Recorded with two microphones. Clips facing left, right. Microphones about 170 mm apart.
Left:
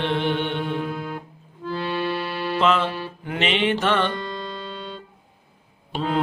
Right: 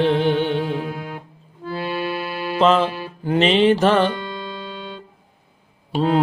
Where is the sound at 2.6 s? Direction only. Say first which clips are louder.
Right 5 dB; 35° right (ahead or behind).